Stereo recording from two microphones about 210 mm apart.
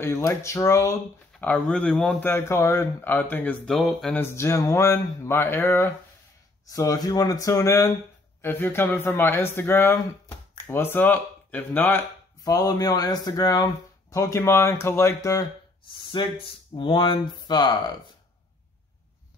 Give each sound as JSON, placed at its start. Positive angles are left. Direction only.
{"t": 0.0, "sound": "speech", "side_deg": 10}